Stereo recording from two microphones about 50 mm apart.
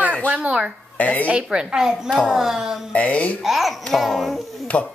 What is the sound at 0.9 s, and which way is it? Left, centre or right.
Speech, left.